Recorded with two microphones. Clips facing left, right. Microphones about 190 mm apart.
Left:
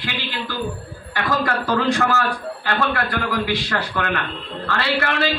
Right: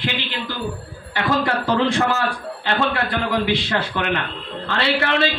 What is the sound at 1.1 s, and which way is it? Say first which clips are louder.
A man's voice: right 2 dB; 25° right (ahead or behind).